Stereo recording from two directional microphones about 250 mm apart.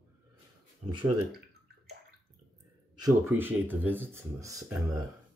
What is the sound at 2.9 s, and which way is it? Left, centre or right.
Speech, centre.